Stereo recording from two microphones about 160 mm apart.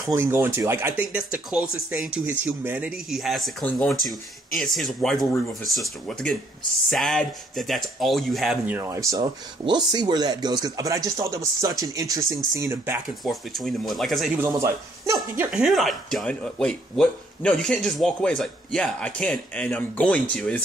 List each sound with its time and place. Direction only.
0.0 s speech: 15° right (ahead or behind)
8.6 s speech: 15° right (ahead or behind)
13.2 s speech: centre (ahead or behind)
14.4 s speech: 20° right (ahead or behind)
15.5 s speech: centre (ahead or behind)